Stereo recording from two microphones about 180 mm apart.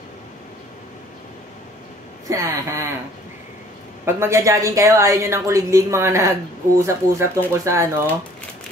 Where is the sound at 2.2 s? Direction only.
15° right (ahead or behind).